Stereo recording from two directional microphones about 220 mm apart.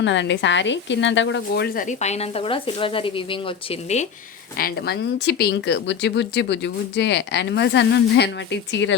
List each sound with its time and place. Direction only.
0.0 s speech: 55° left (ahead or behind); by 3.2 s 25° left (ahead or behind)
4.5 s speech: 45° left (ahead or behind)